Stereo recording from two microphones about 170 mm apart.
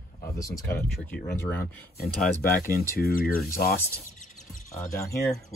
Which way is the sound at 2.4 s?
60° left (ahead or behind).